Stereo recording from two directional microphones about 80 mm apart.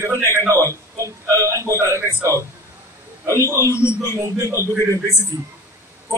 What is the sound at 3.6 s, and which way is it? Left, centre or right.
Speech, left.